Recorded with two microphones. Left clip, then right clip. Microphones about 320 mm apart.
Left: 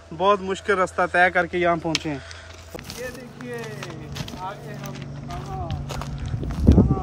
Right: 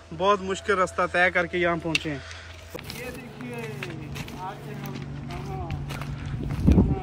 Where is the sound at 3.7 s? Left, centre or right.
Centre.